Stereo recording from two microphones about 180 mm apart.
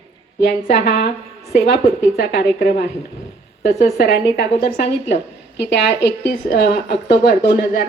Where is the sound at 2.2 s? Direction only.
65° left (ahead or behind).